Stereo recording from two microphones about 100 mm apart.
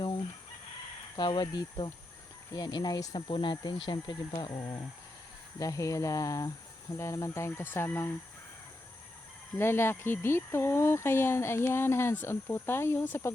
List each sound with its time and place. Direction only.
1.1 s speech: 50° left (ahead or behind)
3.2 s speech: 55° left (ahead or behind); by 8.1 s 25° left (ahead or behind)
9.6 s speech: 25° left (ahead or behind)